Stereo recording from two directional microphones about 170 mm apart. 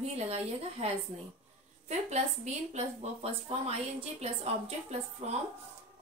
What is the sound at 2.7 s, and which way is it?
A woman's voice, 35° right (ahead or behind).